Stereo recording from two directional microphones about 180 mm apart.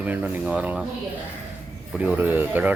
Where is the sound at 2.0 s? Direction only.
10° right (ahead or behind).